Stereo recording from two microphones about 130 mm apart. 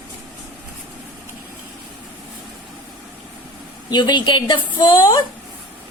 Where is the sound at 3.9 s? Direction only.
35° left (ahead or behind).